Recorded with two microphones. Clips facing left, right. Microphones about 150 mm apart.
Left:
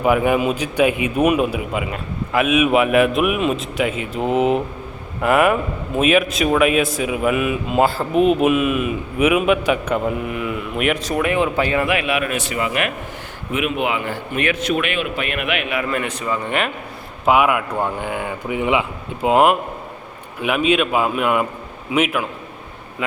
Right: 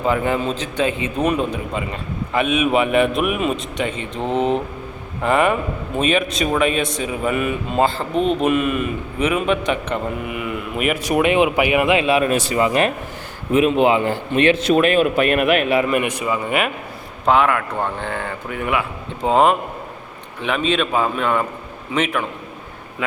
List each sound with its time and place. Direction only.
0.0 s a man's voice: 10° left (ahead or behind)
11.0 s a man's voice: 20° right (ahead or behind); by 15.8 s 40° right (ahead or behind)
15.8 s a man's voice: 15° right (ahead or behind)
17.2 s speech: 10° left (ahead or behind)
19.2 s speech: 5° left (ahead or behind)